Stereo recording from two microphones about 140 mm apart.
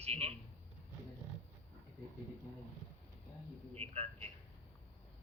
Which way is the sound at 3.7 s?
45° right (ahead or behind).